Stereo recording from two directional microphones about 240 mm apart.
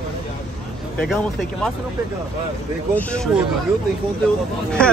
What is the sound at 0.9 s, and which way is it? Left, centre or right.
Speech, centre.